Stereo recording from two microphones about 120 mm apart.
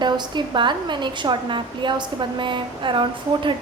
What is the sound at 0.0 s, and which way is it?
A woman's voice, 40° right (ahead or behind).